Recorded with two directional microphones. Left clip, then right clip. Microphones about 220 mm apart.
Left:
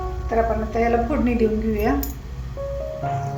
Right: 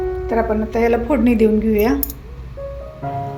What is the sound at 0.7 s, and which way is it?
A woman's voice, 50° right (ahead or behind).